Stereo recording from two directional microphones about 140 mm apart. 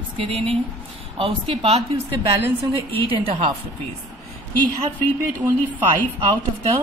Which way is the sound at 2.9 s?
40° right (ahead or behind).